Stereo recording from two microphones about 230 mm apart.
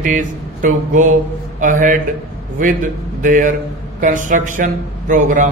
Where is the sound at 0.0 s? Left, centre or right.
Right.